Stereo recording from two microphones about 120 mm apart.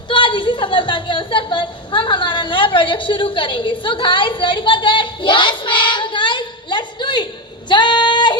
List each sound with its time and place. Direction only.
0.1 s a woman's voice: 40° left (ahead or behind)
7.7 s female singing: 40° left (ahead or behind)